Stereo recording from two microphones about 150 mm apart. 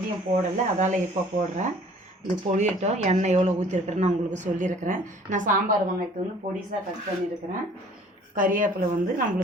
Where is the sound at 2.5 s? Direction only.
50° right (ahead or behind).